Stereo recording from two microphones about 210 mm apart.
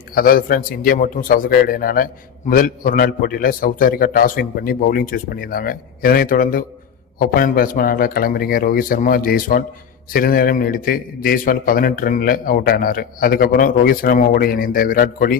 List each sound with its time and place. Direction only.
0.1 s a man's voice: 45° left (ahead or behind)